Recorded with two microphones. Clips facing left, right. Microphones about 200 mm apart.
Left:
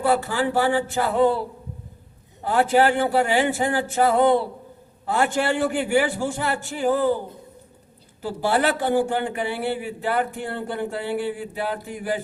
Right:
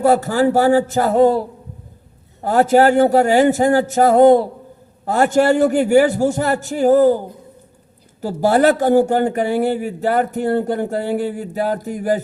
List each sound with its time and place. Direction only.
0.0 s a man's voice: 40° right (ahead or behind)
8.2 s a man's voice: 40° right (ahead or behind)